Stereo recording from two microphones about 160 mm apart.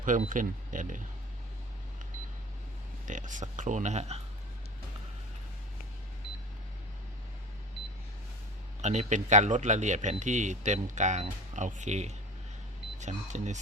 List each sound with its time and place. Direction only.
0.0 s speech: 55° right (ahead or behind)
3.1 s speech: 50° right (ahead or behind)
8.8 s speech: 45° right (ahead or behind)